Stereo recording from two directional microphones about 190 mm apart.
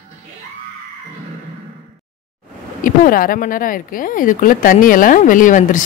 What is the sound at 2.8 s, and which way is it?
Speech, 45° left (ahead or behind).